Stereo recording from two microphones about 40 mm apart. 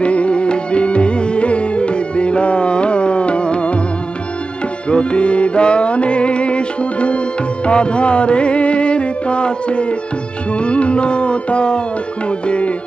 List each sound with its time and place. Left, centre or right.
0.0 s music: left
4.8 s music: left